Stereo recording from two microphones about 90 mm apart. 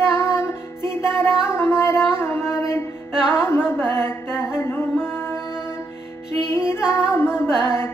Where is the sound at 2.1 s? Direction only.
30° left (ahead or behind).